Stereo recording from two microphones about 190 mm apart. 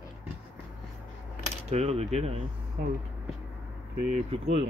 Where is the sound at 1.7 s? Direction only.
35° right (ahead or behind).